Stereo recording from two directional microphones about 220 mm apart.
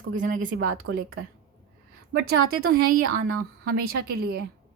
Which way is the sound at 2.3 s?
45° right (ahead or behind).